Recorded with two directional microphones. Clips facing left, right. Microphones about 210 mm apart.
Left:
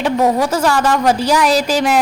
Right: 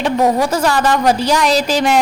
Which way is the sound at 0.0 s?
5° left (ahead or behind).